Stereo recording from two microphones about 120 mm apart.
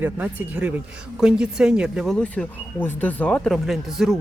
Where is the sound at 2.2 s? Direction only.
15° left (ahead or behind).